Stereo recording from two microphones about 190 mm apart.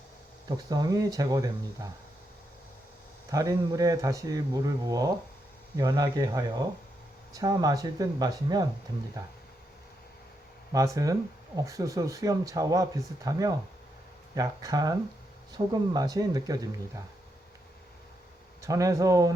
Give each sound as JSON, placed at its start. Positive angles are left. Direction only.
{"t": 0.4, "sound": "speech", "side_deg": -20}
{"t": 3.2, "sound": "speech", "side_deg": -15}
{"t": 10.9, "sound": "speech", "side_deg": -20}
{"t": 18.6, "sound": "speech", "side_deg": -15}